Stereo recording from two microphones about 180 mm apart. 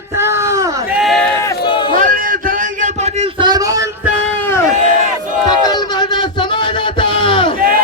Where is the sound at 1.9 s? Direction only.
50° right (ahead or behind).